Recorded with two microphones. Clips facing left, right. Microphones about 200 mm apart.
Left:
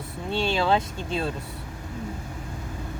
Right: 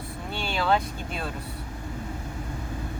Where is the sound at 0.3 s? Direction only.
25° left (ahead or behind).